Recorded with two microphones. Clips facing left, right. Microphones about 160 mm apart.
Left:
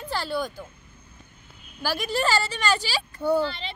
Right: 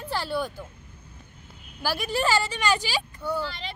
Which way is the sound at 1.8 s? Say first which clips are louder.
Left 1 dB; 10° right (ahead or behind).